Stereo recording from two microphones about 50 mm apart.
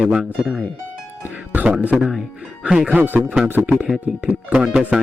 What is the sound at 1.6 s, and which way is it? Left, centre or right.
Speech, right.